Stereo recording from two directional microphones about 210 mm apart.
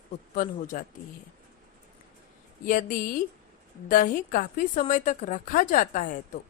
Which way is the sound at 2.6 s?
40° left (ahead or behind).